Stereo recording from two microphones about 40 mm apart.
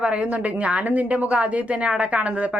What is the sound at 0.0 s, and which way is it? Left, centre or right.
A woman's voice, right.